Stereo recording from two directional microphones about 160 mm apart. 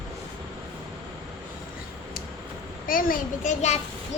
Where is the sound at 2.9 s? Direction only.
60° left (ahead or behind).